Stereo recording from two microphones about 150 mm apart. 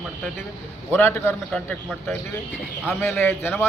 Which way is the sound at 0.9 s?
15° left (ahead or behind).